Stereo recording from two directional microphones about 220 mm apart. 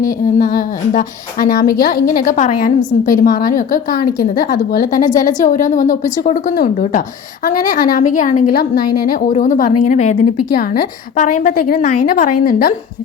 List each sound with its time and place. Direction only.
0.0 s a woman's voice: 40° left (ahead or behind)